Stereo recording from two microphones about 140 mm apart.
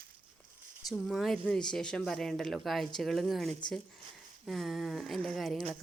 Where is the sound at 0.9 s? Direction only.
Centre (ahead or behind).